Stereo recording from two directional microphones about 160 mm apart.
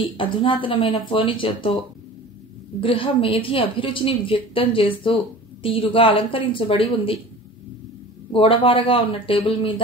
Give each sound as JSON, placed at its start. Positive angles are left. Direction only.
{"t": 0.0, "sound": "a woman's voice", "side_deg": 30}
{"t": 2.8, "sound": "a woman's voice", "side_deg": 35}
{"t": 8.3, "sound": "a woman's voice", "side_deg": 35}